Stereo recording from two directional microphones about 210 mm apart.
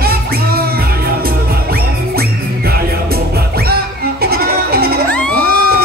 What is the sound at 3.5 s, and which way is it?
Music, 45° right (ahead or behind).